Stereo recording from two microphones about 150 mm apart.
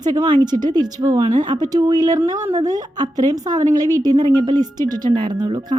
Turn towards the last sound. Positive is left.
turn(degrees=-25)  # may be behind; listen again after turning